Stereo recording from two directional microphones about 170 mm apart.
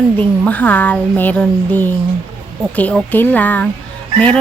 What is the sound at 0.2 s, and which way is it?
Speech, 10° left (ahead or behind).